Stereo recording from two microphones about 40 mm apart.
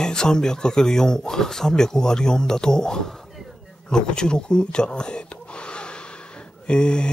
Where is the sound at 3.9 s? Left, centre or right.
Centre.